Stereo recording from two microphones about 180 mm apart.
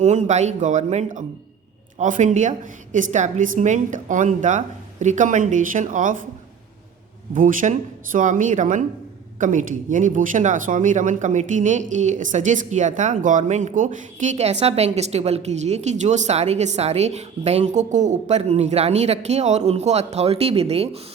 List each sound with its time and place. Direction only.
0.0 s a woman's voice: 40° right (ahead or behind)
7.3 s a woman's voice: 45° right (ahead or behind)